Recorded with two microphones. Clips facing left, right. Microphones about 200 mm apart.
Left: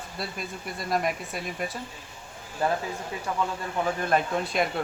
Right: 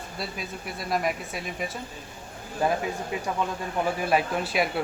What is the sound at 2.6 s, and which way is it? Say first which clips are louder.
Speech: right 2 dB; 15° right (ahead or behind).